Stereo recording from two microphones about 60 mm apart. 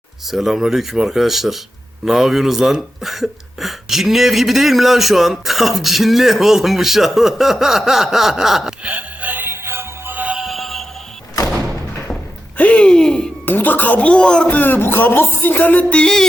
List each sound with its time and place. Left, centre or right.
0.3 s speech: centre
8.8 s music: right
10.3 s music: centre
12.5 s a sound: left
13.4 s speech: left; by 14.4 s centre
14.4 s music: left